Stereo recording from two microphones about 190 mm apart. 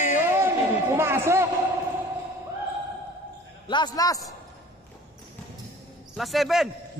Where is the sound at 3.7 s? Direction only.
25° left (ahead or behind).